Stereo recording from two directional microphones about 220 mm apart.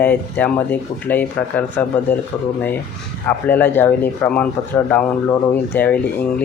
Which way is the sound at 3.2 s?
10° left (ahead or behind).